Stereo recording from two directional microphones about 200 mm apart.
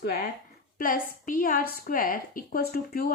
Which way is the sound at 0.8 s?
45° left (ahead or behind).